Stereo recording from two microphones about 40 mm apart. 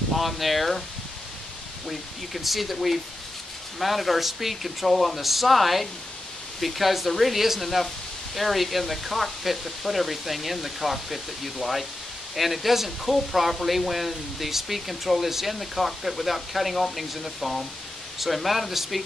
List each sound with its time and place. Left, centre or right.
0.1 s speech: centre
1.9 s speech: centre